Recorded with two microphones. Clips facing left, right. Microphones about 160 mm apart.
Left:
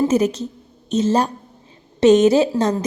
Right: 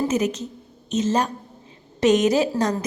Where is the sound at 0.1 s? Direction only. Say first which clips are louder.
Left 5 dB; 30° left (ahead or behind).